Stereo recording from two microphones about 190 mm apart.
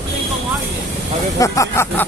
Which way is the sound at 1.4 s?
15° left (ahead or behind).